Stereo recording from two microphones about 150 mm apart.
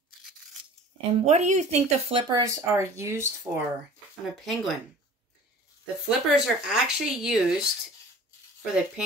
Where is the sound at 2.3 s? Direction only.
20° right (ahead or behind).